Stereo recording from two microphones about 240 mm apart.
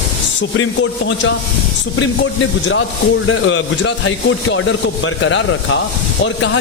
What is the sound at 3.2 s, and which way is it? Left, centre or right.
Speech, left.